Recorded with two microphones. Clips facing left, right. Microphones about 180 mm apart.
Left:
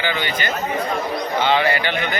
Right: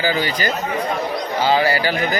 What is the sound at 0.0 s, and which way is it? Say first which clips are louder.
A man's voice: right 3 dB; 35° right (ahead or behind).